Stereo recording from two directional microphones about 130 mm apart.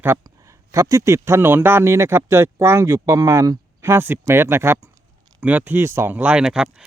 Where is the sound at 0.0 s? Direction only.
20° right (ahead or behind).